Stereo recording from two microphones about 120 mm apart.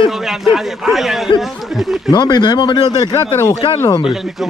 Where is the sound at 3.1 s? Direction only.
20° left (ahead or behind).